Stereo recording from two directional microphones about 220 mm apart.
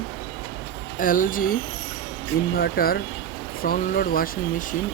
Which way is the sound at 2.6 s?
45° left (ahead or behind).